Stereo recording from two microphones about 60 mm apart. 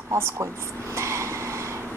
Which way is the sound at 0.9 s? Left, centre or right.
Right.